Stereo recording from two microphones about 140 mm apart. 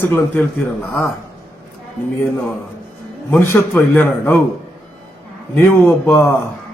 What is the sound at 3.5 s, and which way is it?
Speech, 15° left (ahead or behind).